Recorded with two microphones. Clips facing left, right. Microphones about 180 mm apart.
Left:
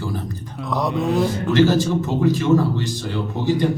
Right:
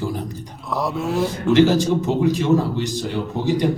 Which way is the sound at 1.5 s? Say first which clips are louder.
Right 1 dB; 20° right (ahead or behind).